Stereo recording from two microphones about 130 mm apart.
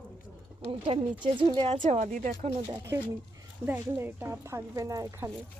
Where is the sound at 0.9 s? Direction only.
45° right (ahead or behind).